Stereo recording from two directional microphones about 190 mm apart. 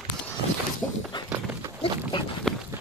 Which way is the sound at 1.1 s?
25° left (ahead or behind).